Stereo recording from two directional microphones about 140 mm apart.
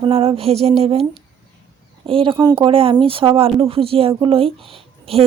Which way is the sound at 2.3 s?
30° right (ahead or behind).